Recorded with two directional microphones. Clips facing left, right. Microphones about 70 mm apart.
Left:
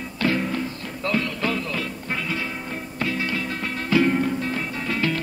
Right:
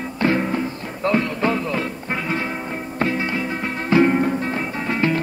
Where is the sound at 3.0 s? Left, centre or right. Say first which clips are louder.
Right 4 dB; right.